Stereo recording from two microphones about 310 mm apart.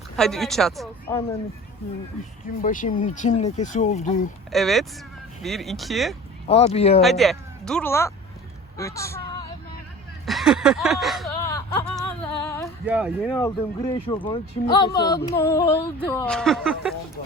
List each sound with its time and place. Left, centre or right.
0.2 s speech: centre
2.6 s speech: left
4.5 s speech: centre
6.5 s speech: centre
7.0 s speech: centre
8.8 s a sound: centre
10.2 s speech: centre
11.4 s a sound: centre
12.8 s speech: centre
13.3 s a sound: centre